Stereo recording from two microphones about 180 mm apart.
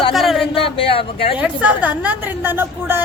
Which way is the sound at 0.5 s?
30° left (ahead or behind).